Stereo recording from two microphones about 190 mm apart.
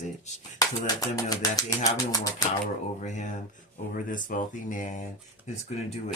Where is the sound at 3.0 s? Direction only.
40° left (ahead or behind).